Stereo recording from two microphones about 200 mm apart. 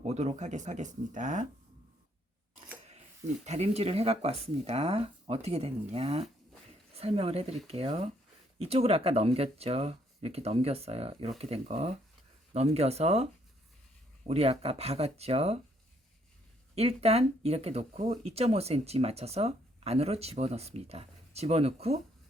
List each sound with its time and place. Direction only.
0.0 s speech: 35° right (ahead or behind)
3.4 s speech: 35° right (ahead or behind)
14.3 s speech: 30° right (ahead or behind)
16.7 s speech: 30° right (ahead or behind)